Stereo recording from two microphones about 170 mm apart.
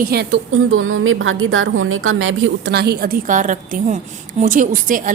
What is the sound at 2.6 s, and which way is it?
A woman's voice, 75° right (ahead or behind).